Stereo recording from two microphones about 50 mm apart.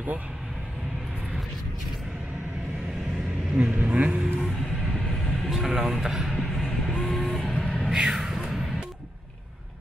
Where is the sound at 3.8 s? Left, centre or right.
Right.